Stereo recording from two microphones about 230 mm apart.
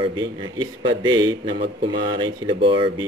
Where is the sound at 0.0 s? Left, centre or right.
Centre.